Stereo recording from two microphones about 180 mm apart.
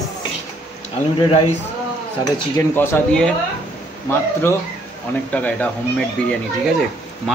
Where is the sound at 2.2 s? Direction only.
15° left (ahead or behind).